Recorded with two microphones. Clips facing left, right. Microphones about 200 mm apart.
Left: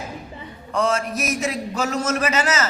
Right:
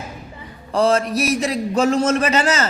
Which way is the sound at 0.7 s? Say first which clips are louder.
Right 5 dB; 35° right (ahead or behind).